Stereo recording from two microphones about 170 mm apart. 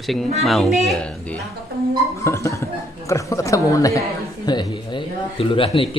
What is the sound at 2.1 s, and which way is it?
Speech, 15° left (ahead or behind).